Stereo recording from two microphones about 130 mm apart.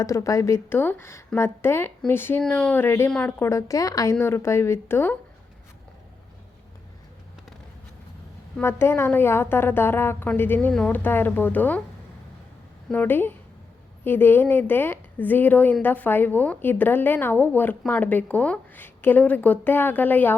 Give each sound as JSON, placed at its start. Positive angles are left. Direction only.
{"t": 0.0, "sound": "a woman's voice", "side_deg": 25}
{"t": 8.6, "sound": "a woman's voice", "side_deg": 20}
{"t": 12.9, "sound": "a woman's voice", "side_deg": 15}